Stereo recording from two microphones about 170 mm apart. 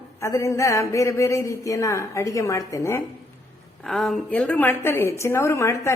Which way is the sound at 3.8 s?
Centre (ahead or behind).